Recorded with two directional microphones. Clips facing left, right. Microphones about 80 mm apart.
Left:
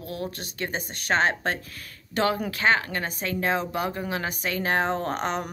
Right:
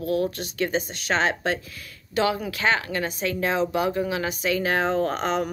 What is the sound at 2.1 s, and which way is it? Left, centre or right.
Speech, left.